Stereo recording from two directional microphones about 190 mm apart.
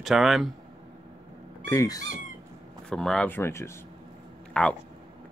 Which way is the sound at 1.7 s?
15° left (ahead or behind).